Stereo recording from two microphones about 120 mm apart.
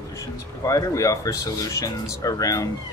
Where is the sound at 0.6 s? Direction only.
30° left (ahead or behind).